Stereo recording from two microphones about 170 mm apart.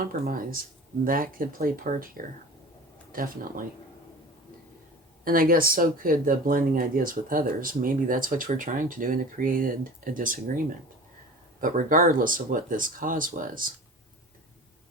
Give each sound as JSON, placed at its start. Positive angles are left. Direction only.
{"t": 0.0, "sound": "speech", "side_deg": -55}
{"t": 5.2, "sound": "speech", "side_deg": -55}